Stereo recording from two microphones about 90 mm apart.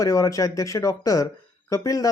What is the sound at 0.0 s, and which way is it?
Speech, 40° left (ahead or behind).